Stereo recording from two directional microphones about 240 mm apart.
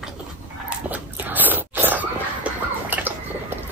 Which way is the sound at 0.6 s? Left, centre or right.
Centre.